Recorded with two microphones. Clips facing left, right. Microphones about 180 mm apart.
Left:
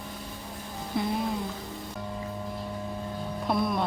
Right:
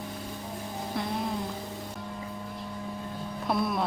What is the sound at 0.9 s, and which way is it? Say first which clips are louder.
Speech: left 5 dB; centre (ahead or behind).